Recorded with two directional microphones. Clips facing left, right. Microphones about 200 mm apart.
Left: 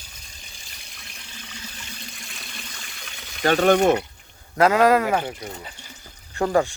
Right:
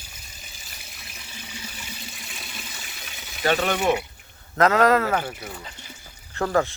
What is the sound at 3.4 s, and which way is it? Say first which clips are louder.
Speech: left 5 dB; 45° left (ahead or behind).